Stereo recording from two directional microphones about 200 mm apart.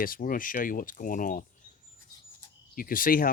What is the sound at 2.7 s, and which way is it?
Speech, 45° left (ahead or behind).